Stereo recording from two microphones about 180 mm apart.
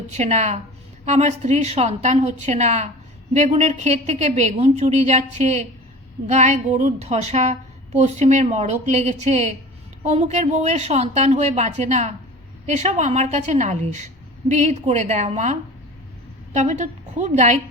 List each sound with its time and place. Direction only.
0.1 s a woman's voice: 40° right (ahead or behind)